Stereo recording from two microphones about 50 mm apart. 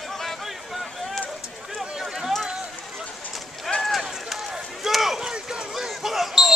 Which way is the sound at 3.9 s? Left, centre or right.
Centre.